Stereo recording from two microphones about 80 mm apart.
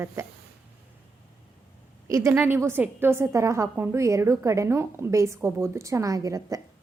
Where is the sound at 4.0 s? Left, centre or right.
Right.